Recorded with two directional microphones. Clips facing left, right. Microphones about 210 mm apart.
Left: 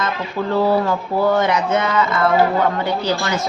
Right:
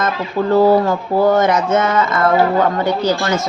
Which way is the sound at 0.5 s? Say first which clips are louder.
Right 5 dB; 40° right (ahead or behind).